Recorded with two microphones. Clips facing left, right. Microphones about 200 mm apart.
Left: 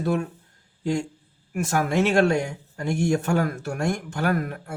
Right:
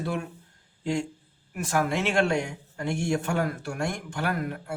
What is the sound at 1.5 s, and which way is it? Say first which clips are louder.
Speech: left 3 dB; 45° left (ahead or behind).